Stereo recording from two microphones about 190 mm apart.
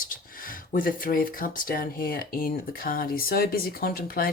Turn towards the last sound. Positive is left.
turn(degrees=50)  # may be behind; listen again after turning